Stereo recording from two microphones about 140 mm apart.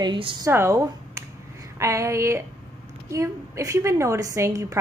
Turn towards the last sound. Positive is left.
turn(degrees=-20)  # may be behind; listen again after turning